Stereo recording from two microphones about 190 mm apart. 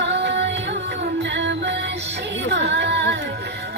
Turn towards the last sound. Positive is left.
turn(degrees=-65)  # may be behind; listen again after turning